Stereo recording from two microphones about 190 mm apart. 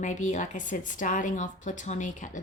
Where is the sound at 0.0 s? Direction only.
40° left (ahead or behind).